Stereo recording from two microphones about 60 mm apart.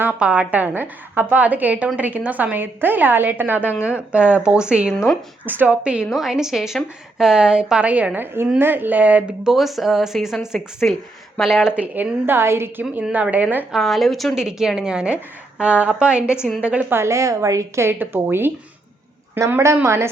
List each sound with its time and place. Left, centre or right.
0.2 s a woman's voice: right
3.8 s a woman's voice: centre
6.1 s a woman's voice: centre; by 9.3 s right
9.4 s a woman's voice: centre
10.8 s speech: centre
11.3 s speech: centre
11.7 s a woman's voice: right
12.2 s a woman's voice: right
12.9 s a woman's voice: right
13.7 s speech: centre
14.3 s a woman's voice: centre
16.9 s a woman's voice: right
17.9 s a woman's voice: right